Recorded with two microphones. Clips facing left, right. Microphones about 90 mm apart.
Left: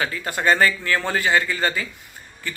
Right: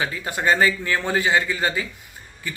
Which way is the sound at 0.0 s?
20° right (ahead or behind).